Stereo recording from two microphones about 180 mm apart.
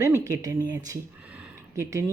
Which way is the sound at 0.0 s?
15° right (ahead or behind).